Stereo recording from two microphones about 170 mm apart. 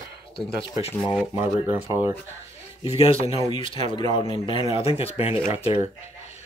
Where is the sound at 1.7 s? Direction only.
15° right (ahead or behind).